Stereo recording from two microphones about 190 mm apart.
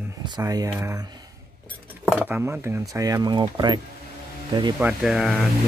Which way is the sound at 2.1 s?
10° right (ahead or behind).